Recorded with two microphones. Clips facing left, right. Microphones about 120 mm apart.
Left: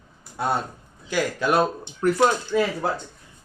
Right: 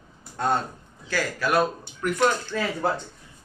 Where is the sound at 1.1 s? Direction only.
20° left (ahead or behind).